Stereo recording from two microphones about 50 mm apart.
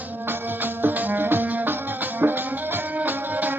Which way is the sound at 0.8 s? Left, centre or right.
Right.